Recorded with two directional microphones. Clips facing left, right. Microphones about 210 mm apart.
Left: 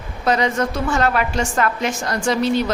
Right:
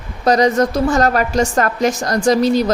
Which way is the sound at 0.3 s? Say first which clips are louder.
Right 6 dB; 40° right (ahead or behind).